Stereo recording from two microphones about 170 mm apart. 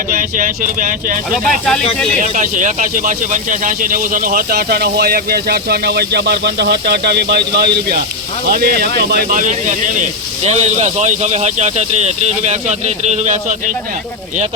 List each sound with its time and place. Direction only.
0.1 s speech: 50° right (ahead or behind)
1.5 s speech: 5° left (ahead or behind)
2.2 s speech: 50° right (ahead or behind)